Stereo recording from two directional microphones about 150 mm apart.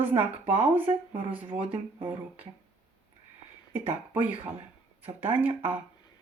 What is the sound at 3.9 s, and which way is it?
Speech, 10° right (ahead or behind).